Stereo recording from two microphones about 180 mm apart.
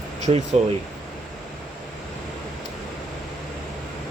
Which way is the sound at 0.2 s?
40° right (ahead or behind).